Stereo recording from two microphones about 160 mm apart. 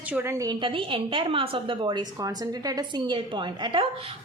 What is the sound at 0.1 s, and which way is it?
A woman's voice, 15° right (ahead or behind).